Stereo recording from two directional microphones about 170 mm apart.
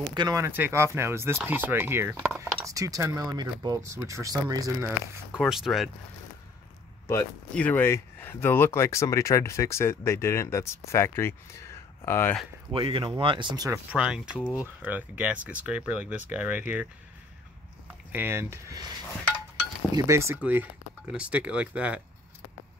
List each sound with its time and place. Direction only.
0.1 s speech: 20° right (ahead or behind)
5.3 s speech: centre (ahead or behind)
7.1 s speech: 10° left (ahead or behind)
12.7 s speech: 30° right (ahead or behind)
13.7 s speech: 5° right (ahead or behind)
14.4 s speech: 20° left (ahead or behind)
14.8 s speech: 10° right (ahead or behind)
18.1 s speech: 15° right (ahead or behind)
20.0 s speech: 15° right (ahead or behind)